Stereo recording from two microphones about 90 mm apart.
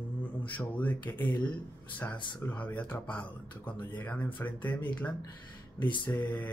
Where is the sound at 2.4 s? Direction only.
15° left (ahead or behind).